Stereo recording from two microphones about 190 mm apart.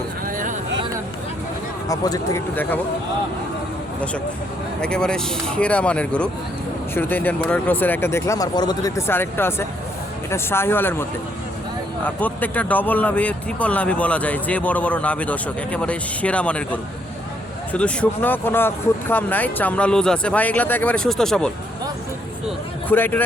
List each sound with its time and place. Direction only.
0.3 s vehicle: 45° right (ahead or behind)
1.9 s speech: 15° left (ahead or behind)
4.8 s speech: 5° left (ahead or behind)
12.0 s speech: 10° left (ahead or behind)
22.9 s speech: 10° left (ahead or behind)